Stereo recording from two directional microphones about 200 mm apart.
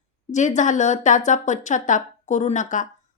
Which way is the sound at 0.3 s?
35° left (ahead or behind).